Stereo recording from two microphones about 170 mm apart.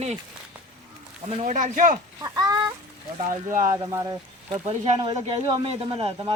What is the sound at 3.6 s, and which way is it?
Speech, 20° right (ahead or behind).